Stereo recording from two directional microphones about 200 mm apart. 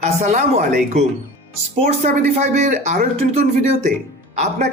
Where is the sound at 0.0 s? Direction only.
35° right (ahead or behind).